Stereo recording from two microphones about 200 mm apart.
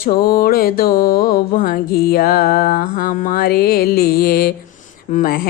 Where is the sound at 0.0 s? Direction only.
45° left (ahead or behind).